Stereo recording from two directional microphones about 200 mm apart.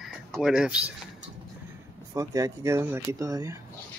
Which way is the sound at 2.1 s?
15° right (ahead or behind).